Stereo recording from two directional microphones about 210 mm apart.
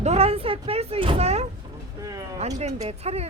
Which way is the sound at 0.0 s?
30° right (ahead or behind).